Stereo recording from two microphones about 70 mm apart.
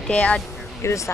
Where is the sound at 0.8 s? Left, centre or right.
Left.